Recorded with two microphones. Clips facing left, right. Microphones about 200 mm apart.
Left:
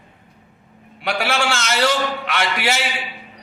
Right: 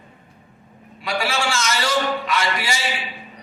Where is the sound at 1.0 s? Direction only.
60° left (ahead or behind).